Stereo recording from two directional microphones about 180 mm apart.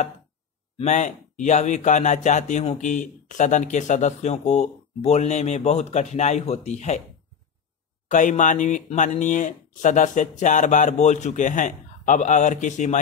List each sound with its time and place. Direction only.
0.7 s speech: 40° left (ahead or behind)
8.1 s speech: 45° left (ahead or behind)